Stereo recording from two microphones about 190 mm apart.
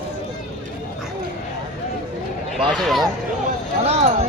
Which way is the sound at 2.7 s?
Centre (ahead or behind).